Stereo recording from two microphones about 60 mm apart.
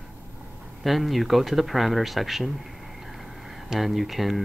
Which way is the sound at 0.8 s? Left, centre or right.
Centre.